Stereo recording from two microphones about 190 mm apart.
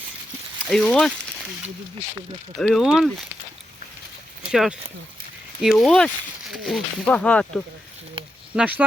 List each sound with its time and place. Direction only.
0.7 s speech: 5° left (ahead or behind)
2.6 s speech: centre (ahead or behind)
4.4 s speech: 5° right (ahead or behind)
8.2 s a sound: 30° right (ahead or behind)
8.5 s speech: 5° right (ahead or behind)